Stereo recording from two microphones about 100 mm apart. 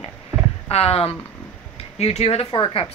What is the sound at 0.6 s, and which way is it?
Speech, 80° left.